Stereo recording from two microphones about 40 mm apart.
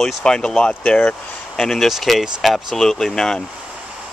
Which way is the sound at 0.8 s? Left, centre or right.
Left.